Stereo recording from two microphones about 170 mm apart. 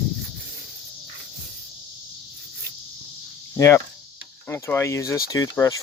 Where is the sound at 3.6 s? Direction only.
15° left (ahead or behind).